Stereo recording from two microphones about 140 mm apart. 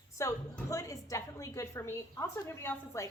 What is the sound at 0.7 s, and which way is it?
A woman's voice, 25° left (ahead or behind).